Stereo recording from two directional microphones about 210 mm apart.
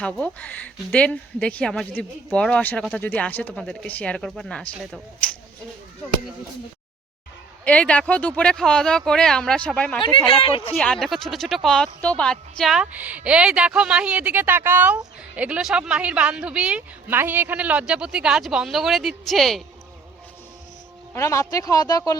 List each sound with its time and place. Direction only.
0.0 s a woman's voice: 5° left (ahead or behind)
7.6 s a woman's voice: 5° left (ahead or behind)
10.0 s speech: 25° left (ahead or behind)
10.8 s a woman's voice: 5° left (ahead or behind)
21.1 s speech: 15° left (ahead or behind)